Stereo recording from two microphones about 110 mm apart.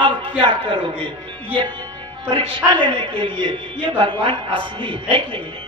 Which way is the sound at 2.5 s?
50° right (ahead or behind).